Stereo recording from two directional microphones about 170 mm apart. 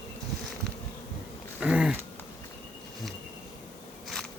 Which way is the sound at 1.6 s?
5° right (ahead or behind).